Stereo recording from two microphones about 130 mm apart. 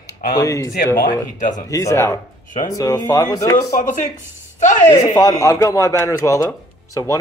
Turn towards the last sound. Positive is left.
turn(degrees=25)  # may be behind; listen again after turning